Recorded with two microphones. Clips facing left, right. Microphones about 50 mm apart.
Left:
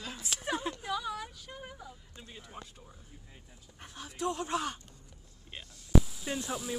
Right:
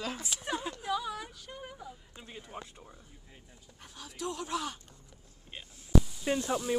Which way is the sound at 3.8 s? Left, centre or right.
Left.